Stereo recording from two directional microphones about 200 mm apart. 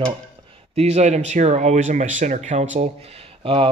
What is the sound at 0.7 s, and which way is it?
Speech, 35° right (ahead or behind).